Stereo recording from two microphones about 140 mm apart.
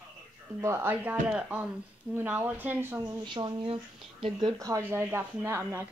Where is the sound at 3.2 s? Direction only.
35° right (ahead or behind); by 5.8 s 20° right (ahead or behind).